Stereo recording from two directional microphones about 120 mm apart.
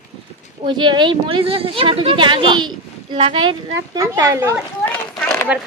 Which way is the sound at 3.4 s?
35° right (ahead or behind).